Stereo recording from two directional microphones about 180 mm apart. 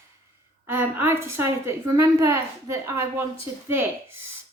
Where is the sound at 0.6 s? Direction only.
10° right (ahead or behind).